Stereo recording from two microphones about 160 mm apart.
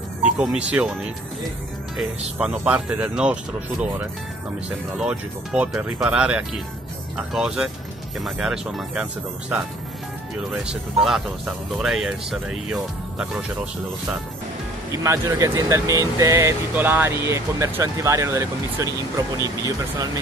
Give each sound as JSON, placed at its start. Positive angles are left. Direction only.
{"t": 0.2, "sound": "speech", "side_deg": -5}
{"t": 2.0, "sound": "speech", "side_deg": -5}
{"t": 4.9, "sound": "speech", "side_deg": -5}
{"t": 10.7, "sound": "speech", "side_deg": 0}
{"t": 14.9, "sound": "speech", "side_deg": -20}